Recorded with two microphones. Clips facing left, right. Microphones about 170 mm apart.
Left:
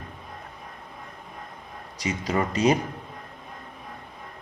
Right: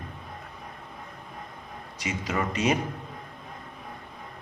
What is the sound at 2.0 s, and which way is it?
Speech, 35° left (ahead or behind).